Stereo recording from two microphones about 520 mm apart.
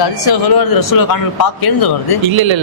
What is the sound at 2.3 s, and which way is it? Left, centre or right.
Speech, right.